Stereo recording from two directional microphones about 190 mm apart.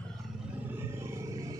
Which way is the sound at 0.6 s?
10° right (ahead or behind).